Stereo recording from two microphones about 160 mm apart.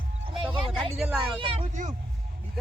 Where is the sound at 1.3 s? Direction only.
35° right (ahead or behind).